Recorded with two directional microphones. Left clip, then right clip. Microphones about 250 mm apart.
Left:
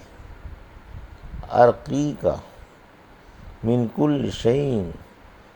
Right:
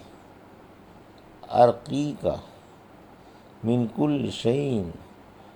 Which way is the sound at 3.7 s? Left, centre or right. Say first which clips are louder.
Left 4 dB; left.